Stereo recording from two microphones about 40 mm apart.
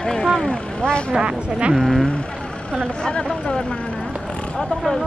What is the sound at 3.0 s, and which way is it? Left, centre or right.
Speech, centre.